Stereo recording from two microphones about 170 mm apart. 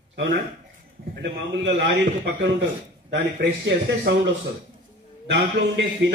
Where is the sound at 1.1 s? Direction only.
90° right.